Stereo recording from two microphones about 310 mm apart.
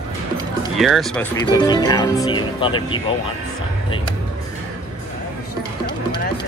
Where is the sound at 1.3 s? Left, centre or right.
Centre.